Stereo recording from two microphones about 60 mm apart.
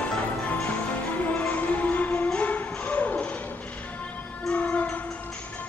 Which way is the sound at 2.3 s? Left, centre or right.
Left.